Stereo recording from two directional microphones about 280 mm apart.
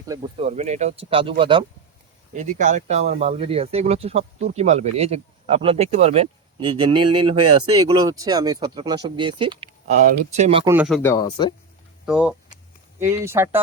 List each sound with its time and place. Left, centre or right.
0.1 s speech: centre
10.8 s speech: centre
11.1 s speech: centre
12.0 s speech: centre